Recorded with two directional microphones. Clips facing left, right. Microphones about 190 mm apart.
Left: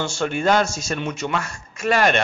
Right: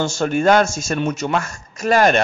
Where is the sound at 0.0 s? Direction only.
40° right (ahead or behind).